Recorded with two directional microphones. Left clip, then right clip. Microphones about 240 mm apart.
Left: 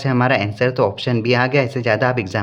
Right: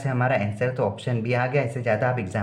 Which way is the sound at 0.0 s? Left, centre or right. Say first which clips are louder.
Left 7 dB; left.